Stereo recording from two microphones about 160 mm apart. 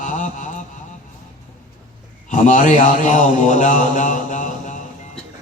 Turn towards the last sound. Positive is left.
turn(degrees=50)  # may be behind; listen again after turning